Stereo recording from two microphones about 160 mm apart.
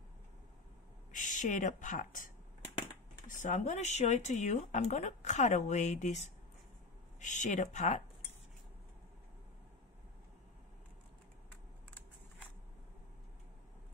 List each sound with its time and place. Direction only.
1.1 s speech: 55° left (ahead or behind)